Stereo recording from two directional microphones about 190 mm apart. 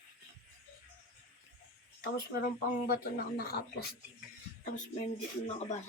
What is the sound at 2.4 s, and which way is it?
Speech, 50° left (ahead or behind).